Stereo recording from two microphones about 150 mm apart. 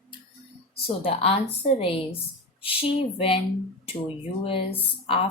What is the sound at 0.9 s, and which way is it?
Speech, 40° left (ahead or behind).